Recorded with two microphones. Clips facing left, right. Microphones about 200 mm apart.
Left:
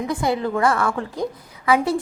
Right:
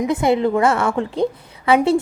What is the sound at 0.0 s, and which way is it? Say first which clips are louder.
A woman's voice: right 5 dB; 20° right (ahead or behind).